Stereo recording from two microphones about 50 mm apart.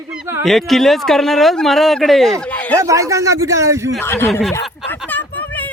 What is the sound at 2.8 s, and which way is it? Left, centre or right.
A man's voice, right.